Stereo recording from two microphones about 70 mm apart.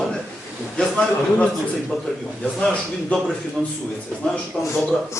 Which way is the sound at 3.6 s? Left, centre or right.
Centre.